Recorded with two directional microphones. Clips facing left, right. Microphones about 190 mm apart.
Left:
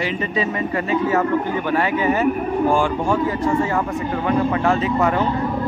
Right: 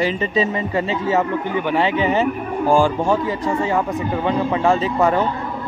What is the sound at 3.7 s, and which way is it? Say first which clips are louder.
Speech: right 2 dB; 20° right (ahead or behind).